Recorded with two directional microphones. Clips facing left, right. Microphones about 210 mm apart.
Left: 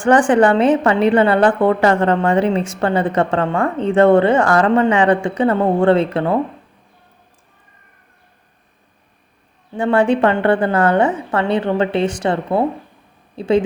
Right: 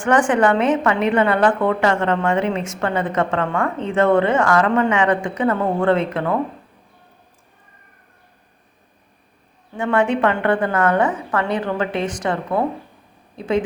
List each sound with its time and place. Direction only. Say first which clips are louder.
0.0 s a woman's voice: left 4 dB; 30° left (ahead or behind)
9.7 s a woman's voice: left 4 dB; 30° left (ahead or behind)